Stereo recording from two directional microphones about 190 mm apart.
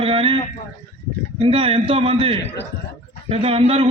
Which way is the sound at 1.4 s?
30° right (ahead or behind).